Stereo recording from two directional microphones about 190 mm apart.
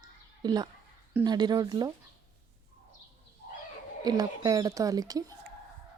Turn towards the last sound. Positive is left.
turn(degrees=-20)  # may be behind; listen again after turning